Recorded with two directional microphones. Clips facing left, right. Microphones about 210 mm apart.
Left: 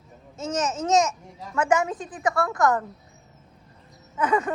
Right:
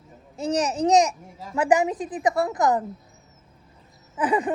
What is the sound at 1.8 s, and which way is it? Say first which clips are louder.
Speech: right 3 dB; 15° right (ahead or behind).